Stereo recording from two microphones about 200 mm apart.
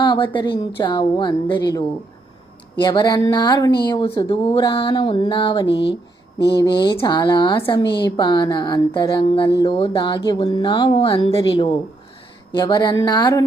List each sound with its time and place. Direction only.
0.0 s a sound: 25° left (ahead or behind)
0.8 s speech: 20° left (ahead or behind)
2.8 s speech: 20° left (ahead or behind)